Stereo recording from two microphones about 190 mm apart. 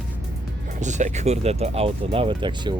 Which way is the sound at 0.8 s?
40° right (ahead or behind).